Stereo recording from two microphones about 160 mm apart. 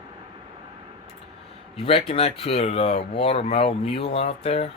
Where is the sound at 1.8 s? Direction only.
35° left (ahead or behind).